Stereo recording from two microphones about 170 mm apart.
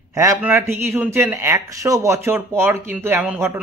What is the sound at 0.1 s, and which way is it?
A man's voice, 20° right (ahead or behind).